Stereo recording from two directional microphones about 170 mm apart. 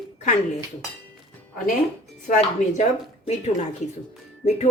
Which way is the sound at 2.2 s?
45° left (ahead or behind).